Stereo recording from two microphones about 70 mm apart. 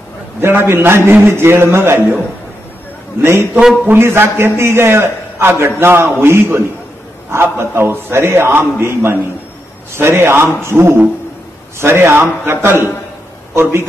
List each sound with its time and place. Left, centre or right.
0.4 s a man's voice: right
3.2 s a man's voice: right